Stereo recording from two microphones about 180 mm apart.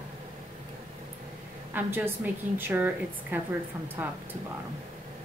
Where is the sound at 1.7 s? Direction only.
10° right (ahead or behind).